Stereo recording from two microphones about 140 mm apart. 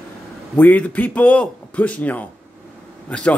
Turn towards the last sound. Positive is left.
turn(degrees=10)  # may be behind; listen again after turning